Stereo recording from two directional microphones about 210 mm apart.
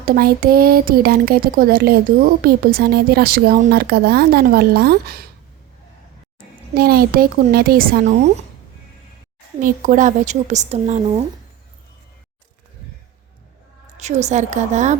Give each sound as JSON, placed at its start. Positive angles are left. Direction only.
{"t": 0.0, "sound": "speech", "side_deg": -45}
{"t": 6.7, "sound": "speech", "side_deg": -45}
{"t": 9.6, "sound": "a woman's voice", "side_deg": -40}
{"t": 13.9, "sound": "a woman's voice", "side_deg": -35}